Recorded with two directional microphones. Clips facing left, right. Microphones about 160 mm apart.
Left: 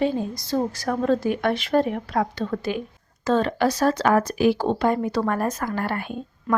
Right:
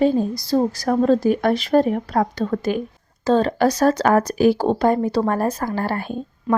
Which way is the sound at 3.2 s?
35° right (ahead or behind).